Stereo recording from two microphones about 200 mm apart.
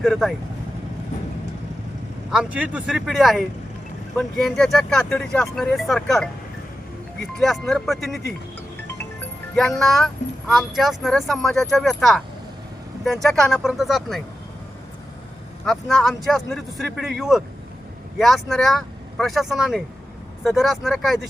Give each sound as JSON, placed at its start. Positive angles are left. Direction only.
{"t": 0.0, "sound": "speech", "side_deg": 0}
{"t": 2.3, "sound": "speech", "side_deg": -5}
{"t": 7.3, "sound": "speech", "side_deg": 0}
{"t": 9.6, "sound": "speech", "side_deg": 0}
{"t": 13.2, "sound": "speech", "side_deg": 0}
{"t": 15.6, "sound": "speech", "side_deg": 0}